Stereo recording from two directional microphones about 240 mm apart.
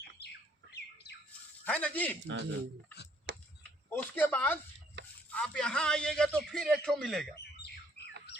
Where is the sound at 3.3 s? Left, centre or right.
Right.